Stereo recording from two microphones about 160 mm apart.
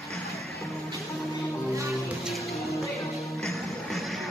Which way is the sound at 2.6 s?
20° left (ahead or behind).